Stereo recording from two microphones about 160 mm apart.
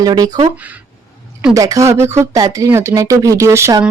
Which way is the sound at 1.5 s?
20° right (ahead or behind).